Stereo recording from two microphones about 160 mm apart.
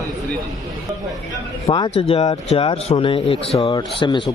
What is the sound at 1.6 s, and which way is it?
Speech, 25° left (ahead or behind).